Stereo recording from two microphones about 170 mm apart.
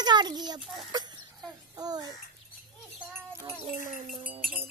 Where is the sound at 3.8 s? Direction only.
50° right (ahead or behind).